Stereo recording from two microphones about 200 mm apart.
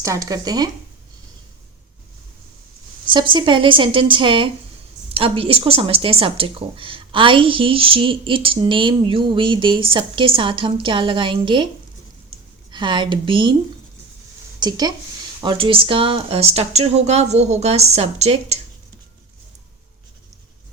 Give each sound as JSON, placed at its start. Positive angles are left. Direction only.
{"t": 0.0, "sound": "speech", "side_deg": -15}
{"t": 3.1, "sound": "speech", "side_deg": -25}
{"t": 12.7, "sound": "speech", "side_deg": -25}
{"t": 14.6, "sound": "speech", "side_deg": -20}